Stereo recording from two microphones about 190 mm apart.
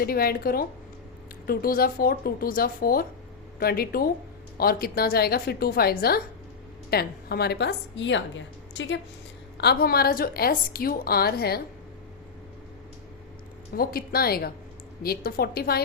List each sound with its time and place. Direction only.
0.0 s a woman's voice: 50° left (ahead or behind); by 9.0 s 75° left (ahead or behind)
9.6 s a woman's voice: 55° left (ahead or behind)
13.7 s a woman's voice: 50° left (ahead or behind)